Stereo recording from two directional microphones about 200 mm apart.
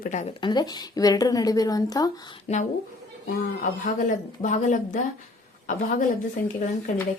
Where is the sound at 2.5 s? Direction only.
35° left (ahead or behind).